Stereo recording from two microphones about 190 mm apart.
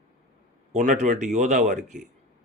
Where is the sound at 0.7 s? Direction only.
40° right (ahead or behind).